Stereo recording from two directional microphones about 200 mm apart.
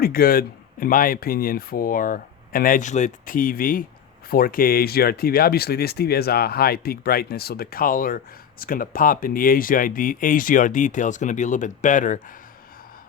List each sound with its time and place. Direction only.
0.0 s speech: 45° left (ahead or behind)